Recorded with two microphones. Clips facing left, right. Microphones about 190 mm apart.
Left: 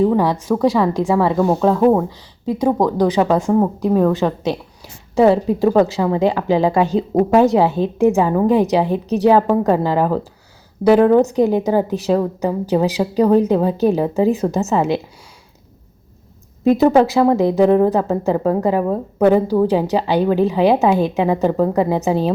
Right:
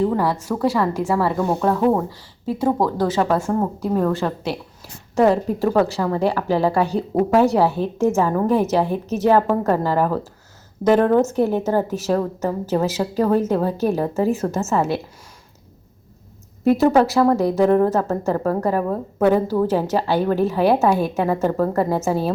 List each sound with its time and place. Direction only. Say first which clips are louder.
0.0 s a woman's voice: left 4 dB; 15° left (ahead or behind)
16.6 s a woman's voice: left 3 dB; 15° left (ahead or behind)